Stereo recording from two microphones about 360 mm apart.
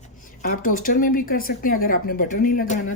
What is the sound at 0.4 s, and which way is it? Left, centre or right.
Speech, left.